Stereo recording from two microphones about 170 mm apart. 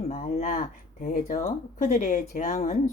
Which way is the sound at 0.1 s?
45° left (ahead or behind).